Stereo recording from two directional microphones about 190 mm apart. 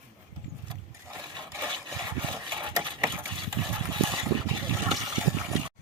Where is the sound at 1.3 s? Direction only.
20° right (ahead or behind).